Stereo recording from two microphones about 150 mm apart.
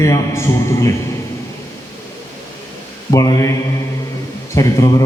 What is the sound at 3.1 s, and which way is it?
Mantra, 25° left (ahead or behind).